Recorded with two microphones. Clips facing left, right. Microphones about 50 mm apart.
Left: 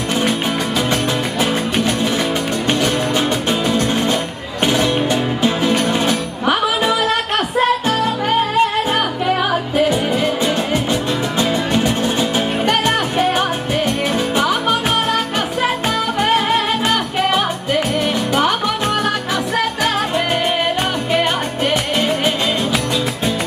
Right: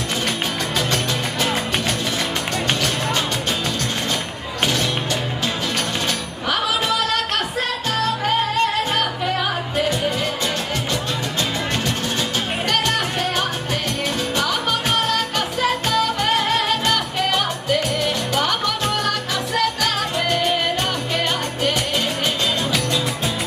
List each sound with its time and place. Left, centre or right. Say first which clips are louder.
1.4 s music: left 4 dB; centre
3.6 s music: left 7 dB; centre
19.0 s music: left 4 dB; centre